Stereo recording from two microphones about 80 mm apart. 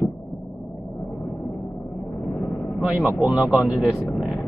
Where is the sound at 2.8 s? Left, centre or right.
Centre.